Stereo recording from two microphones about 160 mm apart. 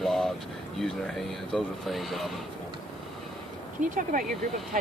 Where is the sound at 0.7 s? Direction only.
Centre (ahead or behind).